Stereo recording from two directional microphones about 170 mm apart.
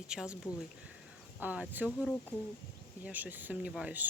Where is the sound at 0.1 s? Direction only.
5° right (ahead or behind).